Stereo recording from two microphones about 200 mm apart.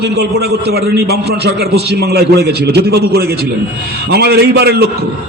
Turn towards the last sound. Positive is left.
turn(degrees=-55)  # may be behind; listen again after turning